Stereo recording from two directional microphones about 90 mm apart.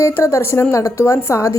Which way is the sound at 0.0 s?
30° left (ahead or behind).